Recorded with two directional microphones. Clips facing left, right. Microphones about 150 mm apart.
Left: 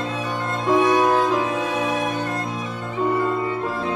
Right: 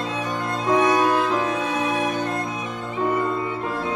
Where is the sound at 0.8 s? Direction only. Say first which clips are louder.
Left 2 dB; 15° left (ahead or behind).